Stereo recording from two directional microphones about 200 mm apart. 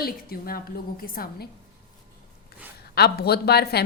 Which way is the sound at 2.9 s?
55° left (ahead or behind).